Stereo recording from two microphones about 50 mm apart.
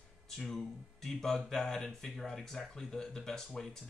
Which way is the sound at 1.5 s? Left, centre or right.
Centre.